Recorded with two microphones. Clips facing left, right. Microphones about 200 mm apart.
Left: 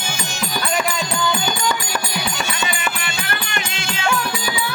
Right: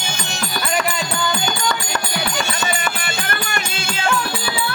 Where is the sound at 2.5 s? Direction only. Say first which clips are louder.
Right 2 dB; 40° right (ahead or behind).